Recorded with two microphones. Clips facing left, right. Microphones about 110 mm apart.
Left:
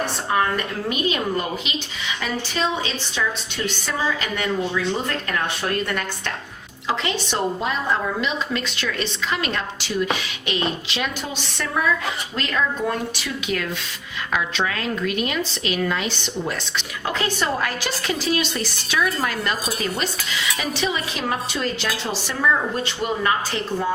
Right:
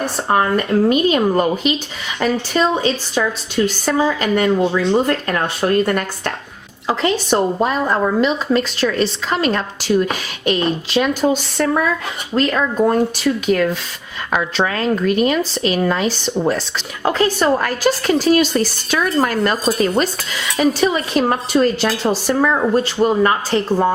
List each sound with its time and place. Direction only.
0.0 s a woman's voice: 40° right (ahead or behind)